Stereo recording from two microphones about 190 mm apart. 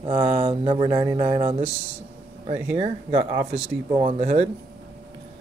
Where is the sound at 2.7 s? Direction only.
30° right (ahead or behind).